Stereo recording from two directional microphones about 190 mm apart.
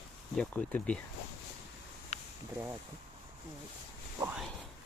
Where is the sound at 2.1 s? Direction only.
35° left (ahead or behind).